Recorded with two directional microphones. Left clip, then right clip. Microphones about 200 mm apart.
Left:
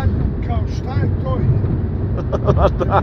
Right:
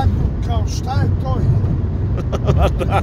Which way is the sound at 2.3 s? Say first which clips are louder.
Left 3 dB; 20° right (ahead or behind).